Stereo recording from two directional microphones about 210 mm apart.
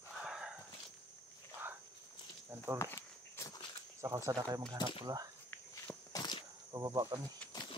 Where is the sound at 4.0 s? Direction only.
15° right (ahead or behind).